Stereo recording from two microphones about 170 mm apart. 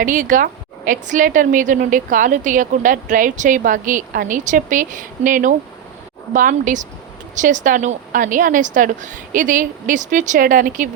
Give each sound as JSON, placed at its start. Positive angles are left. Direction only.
{"t": 0.0, "sound": "a woman's voice", "side_deg": -50}